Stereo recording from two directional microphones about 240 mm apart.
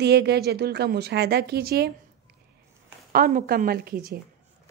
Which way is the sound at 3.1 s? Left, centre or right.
Right.